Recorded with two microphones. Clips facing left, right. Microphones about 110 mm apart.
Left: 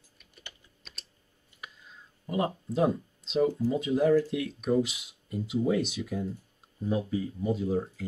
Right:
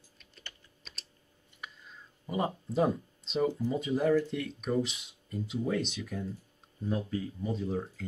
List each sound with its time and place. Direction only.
0.2 s typing: 15° left (ahead or behind)
0.8 s typing: centre (ahead or behind)
1.6 s a sound: centre (ahead or behind)
3.7 s speech: centre (ahead or behind)